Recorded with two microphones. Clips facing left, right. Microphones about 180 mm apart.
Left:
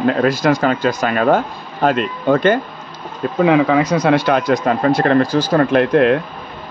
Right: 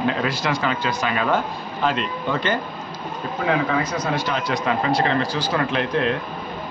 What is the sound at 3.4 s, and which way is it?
Speech, 80° left.